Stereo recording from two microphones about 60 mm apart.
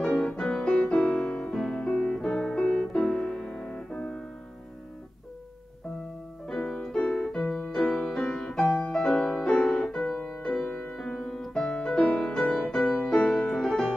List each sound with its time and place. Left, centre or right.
0.0 s music: centre
6.4 s piano: centre
6.9 s music: centre